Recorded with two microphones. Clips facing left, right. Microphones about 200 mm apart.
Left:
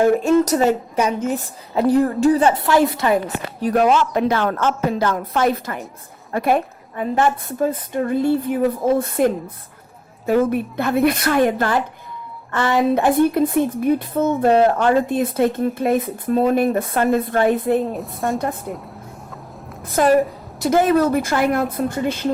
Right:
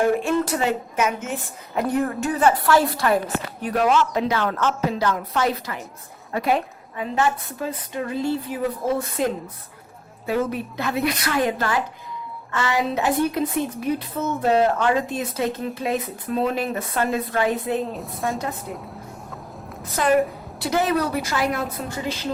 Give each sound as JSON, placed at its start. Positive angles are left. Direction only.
{"t": 0.2, "sound": "a woman's voice", "side_deg": 40}
{"t": 3.6, "sound": "a woman's voice", "side_deg": 40}
{"t": 10.2, "sound": "a woman's voice", "side_deg": 50}
{"t": 17.9, "sound": "a woman's voice", "side_deg": 0}
{"t": 19.8, "sound": "a woman's voice", "side_deg": 45}